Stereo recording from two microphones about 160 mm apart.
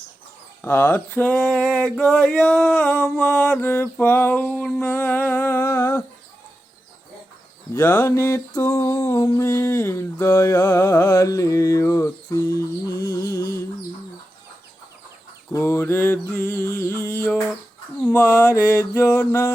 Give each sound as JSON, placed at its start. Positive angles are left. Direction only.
{"t": 0.6, "sound": "mantra", "side_deg": 10}
{"t": 1.4, "sound": "a sound", "side_deg": 0}
{"t": 3.7, "sound": "mantra", "side_deg": 15}
{"t": 7.7, "sound": "mantra", "side_deg": 15}
{"t": 12.9, "sound": "music", "side_deg": 70}
{"t": 13.1, "sound": "music", "side_deg": 20}
{"t": 15.5, "sound": "mantra", "side_deg": 15}